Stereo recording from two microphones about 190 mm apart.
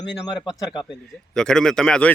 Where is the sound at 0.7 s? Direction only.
Centre (ahead or behind).